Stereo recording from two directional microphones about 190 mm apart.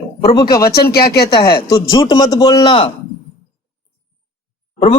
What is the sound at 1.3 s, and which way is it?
Speech, 20° left (ahead or behind).